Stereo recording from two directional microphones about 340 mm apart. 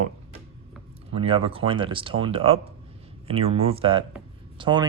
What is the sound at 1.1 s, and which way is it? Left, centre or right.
Speech, centre.